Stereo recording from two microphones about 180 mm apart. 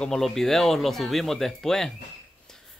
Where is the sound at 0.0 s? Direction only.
Centre (ahead or behind).